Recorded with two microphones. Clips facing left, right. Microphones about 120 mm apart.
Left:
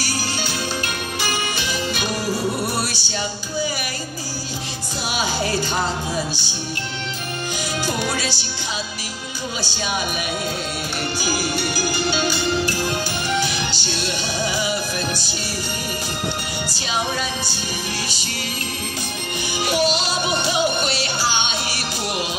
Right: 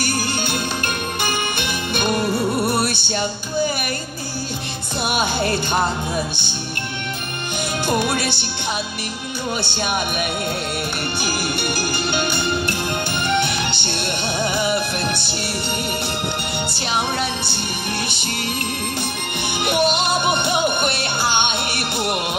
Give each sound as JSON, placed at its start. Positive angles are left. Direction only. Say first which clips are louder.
{"t": 0.0, "sound": "music", "louder": "right 3 dB", "side_deg": -55}
{"t": 5.0, "sound": "music", "louder": "right 3 dB", "side_deg": -60}
{"t": 7.8, "sound": "music", "louder": "right 5 dB", "side_deg": -60}
{"t": 9.6, "sound": "music", "louder": "even", "side_deg": -60}
{"t": 11.1, "sound": "music", "louder": "left 2 dB", "side_deg": -60}
{"t": 16.6, "sound": "music", "louder": "right 1 dB", "side_deg": -60}
{"t": 19.6, "sound": "music", "louder": "right 2 dB", "side_deg": -60}